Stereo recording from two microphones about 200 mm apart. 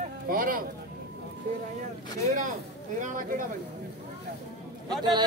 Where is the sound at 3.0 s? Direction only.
40° right (ahead or behind).